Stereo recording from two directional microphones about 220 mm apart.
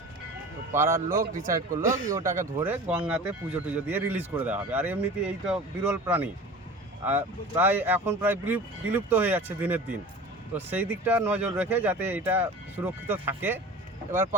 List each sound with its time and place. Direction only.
0.7 s speech: 10° right (ahead or behind)
1.1 s a man's voice: 40° right (ahead or behind)
1.5 s speech: 15° right (ahead or behind)